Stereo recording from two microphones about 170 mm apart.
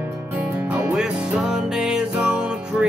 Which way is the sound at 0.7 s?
10° right (ahead or behind).